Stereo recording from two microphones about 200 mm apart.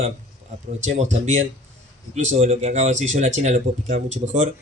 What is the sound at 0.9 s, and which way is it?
Speech, 35° right (ahead or behind).